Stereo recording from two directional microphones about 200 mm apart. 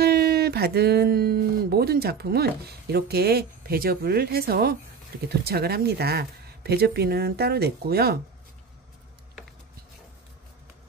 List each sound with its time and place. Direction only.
0.0 s speech: 50° right (ahead or behind)